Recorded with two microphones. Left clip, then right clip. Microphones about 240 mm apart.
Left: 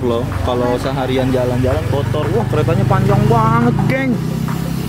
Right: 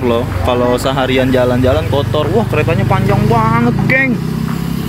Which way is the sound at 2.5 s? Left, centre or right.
Centre.